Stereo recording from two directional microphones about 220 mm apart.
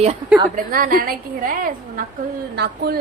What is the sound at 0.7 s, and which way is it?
Speech, 40° right (ahead or behind).